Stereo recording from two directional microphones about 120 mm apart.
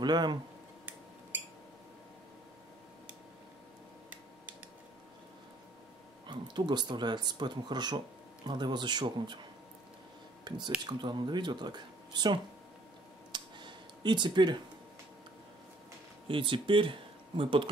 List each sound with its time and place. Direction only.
0.0 s speech: 40° right (ahead or behind)
6.2 s speech: 40° right (ahead or behind)
10.5 s speech: 35° right (ahead or behind)
13.3 s a sound: 40° right (ahead or behind)
16.3 s speech: 45° right (ahead or behind)